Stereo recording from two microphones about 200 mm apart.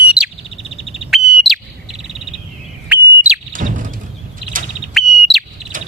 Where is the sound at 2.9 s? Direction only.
5° right (ahead or behind).